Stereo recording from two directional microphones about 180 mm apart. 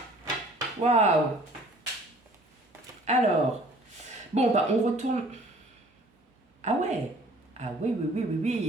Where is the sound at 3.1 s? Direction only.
40° right (ahead or behind).